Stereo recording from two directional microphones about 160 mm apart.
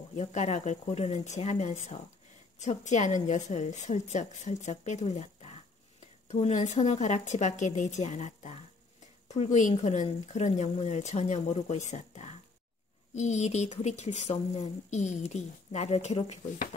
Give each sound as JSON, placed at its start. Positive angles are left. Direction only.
{"t": 0.1, "sound": "a woman's voice", "side_deg": 50}